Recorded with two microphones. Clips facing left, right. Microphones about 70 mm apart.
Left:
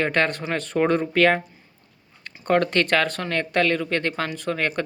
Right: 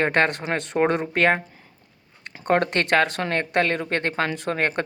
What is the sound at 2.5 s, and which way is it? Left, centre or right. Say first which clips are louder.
Speech: left 1 dB; right.